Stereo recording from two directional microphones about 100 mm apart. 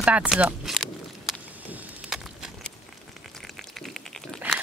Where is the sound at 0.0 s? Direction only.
10° right (ahead or behind).